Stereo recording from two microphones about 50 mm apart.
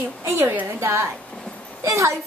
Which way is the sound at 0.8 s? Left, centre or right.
Right.